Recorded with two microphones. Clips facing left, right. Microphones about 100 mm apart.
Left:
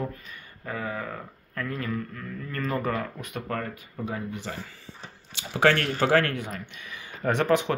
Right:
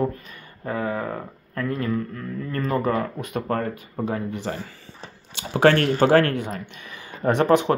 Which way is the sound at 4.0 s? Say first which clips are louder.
Right 6 dB; 55° right (ahead or behind).